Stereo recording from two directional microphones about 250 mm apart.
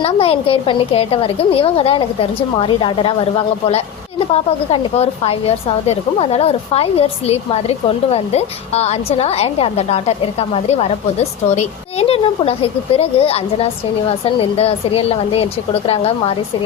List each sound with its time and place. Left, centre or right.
0.0 s a woman's voice: left
4.7 s a woman's voice: left